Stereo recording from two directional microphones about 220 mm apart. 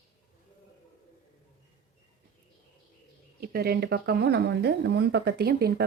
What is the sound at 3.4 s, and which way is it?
A woman's voice, 45° right (ahead or behind).